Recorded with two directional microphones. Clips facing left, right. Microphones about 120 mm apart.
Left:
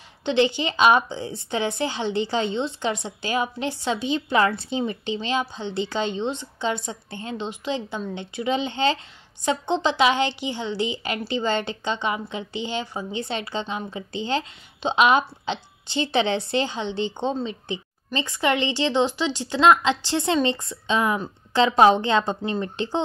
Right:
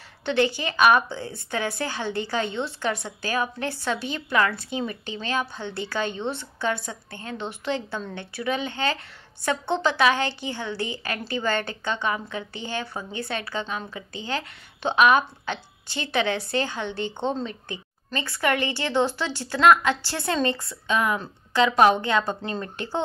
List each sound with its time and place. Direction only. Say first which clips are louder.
0.2 s a woman's voice: left 2 dB; 20° left (ahead or behind)